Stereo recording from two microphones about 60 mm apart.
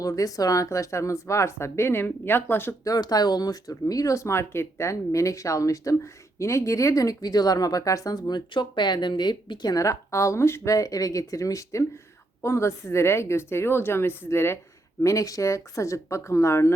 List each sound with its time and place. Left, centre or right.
0.0 s speech: left
2.8 s speech: left
9.6 s speech: left
10.8 s speech: left
12.4 s a woman's voice: left
15.0 s speech: left